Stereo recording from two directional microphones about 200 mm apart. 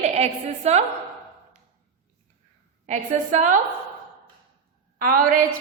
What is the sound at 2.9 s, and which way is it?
Speech, 40° right (ahead or behind).